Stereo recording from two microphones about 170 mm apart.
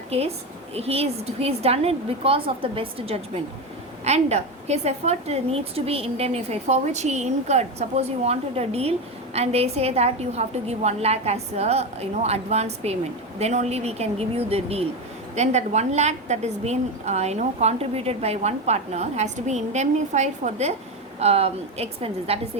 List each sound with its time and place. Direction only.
0.1 s a woman's voice: 35° right (ahead or behind)